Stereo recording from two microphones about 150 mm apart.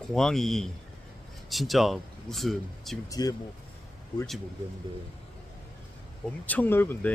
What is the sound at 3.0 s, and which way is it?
Speech, 25° left (ahead or behind).